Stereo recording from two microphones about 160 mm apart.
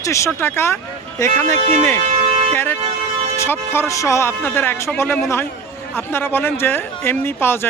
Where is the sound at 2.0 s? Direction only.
45° right (ahead or behind).